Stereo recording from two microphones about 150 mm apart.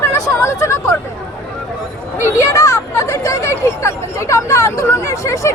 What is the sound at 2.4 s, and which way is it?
Speech, 20° left (ahead or behind).